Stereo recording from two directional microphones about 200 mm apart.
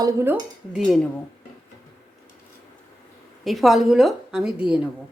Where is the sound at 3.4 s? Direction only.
Centre (ahead or behind).